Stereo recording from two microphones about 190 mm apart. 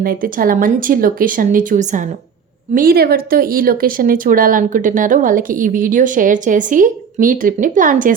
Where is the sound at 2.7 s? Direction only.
50° right (ahead or behind).